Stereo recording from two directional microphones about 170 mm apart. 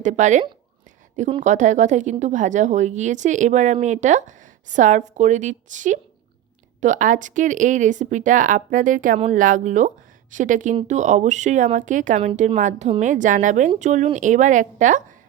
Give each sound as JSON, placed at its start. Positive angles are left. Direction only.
{"t": 0.0, "sound": "speech", "side_deg": -45}